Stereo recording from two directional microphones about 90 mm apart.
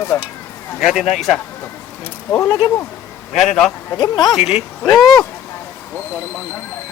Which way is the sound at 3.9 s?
50° left (ahead or behind).